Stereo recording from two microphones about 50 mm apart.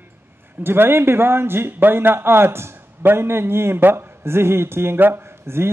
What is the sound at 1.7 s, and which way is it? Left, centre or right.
A man's voice, right.